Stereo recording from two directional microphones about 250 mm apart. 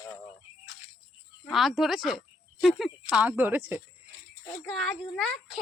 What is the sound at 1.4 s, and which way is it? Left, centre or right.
A woman's voice, centre.